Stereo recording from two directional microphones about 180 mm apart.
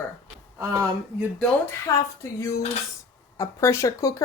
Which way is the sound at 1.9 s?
15° left (ahead or behind).